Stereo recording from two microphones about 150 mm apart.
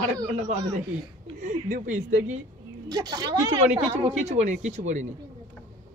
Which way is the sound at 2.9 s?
25° right (ahead or behind).